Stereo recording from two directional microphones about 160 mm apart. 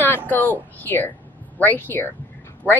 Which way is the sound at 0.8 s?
10° left (ahead or behind).